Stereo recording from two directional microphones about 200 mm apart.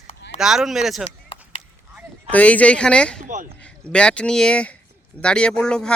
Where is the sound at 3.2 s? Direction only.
40° right (ahead or behind).